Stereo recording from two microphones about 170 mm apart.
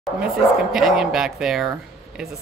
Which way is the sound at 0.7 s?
Centre (ahead or behind).